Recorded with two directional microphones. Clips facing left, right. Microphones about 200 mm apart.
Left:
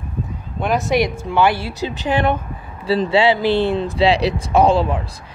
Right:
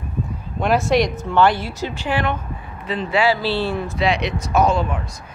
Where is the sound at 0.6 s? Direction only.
Centre (ahead or behind); by 2.2 s 20° left (ahead or behind).